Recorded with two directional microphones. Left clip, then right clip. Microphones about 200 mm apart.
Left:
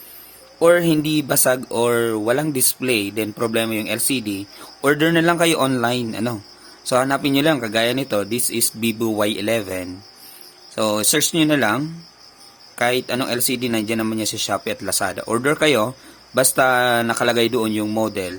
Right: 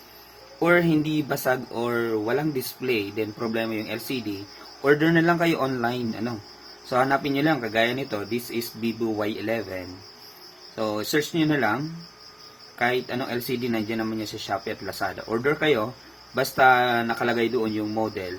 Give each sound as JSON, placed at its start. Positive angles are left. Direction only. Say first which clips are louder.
{"t": 0.6, "sound": "speech", "louder": "left 6 dB", "side_deg": 65}
{"t": 10.8, "sound": "speech", "louder": "left 6 dB", "side_deg": 60}
{"t": 12.8, "sound": "speech", "louder": "left 5 dB", "side_deg": 60}